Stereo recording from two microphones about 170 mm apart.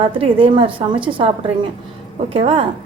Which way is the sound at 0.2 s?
30° right (ahead or behind).